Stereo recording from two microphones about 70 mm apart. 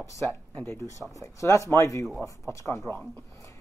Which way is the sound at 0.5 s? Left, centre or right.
Left.